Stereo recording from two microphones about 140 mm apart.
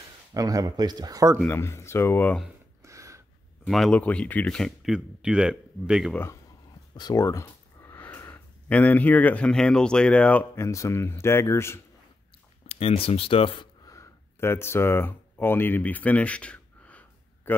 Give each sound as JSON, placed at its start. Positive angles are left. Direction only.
{"t": 0.3, "sound": "speech", "side_deg": -25}
{"t": 1.5, "sound": "speech", "side_deg": 20}
{"t": 2.8, "sound": "a sound", "side_deg": -20}
{"t": 3.6, "sound": "speech", "side_deg": 0}
{"t": 7.0, "sound": "speech", "side_deg": 25}
{"t": 12.6, "sound": "speech", "side_deg": 45}
{"t": 13.8, "sound": "a man's voice", "side_deg": 20}